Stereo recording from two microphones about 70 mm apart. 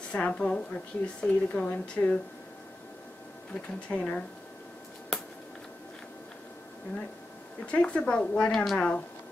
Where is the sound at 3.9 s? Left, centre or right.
Left.